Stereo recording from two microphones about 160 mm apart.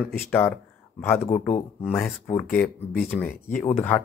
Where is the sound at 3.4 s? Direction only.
45° left (ahead or behind).